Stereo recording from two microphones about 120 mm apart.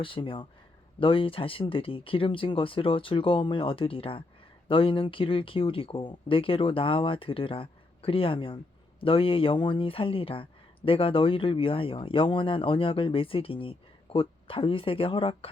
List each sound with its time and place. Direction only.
0.0 s speech: 45° left (ahead or behind)